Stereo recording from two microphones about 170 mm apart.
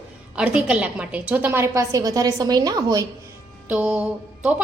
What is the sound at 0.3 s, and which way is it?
A woman's voice, 5° right (ahead or behind).